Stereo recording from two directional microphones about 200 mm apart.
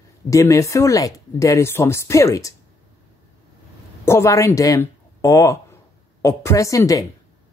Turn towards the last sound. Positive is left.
turn(degrees=15)  # may be behind; listen again after turning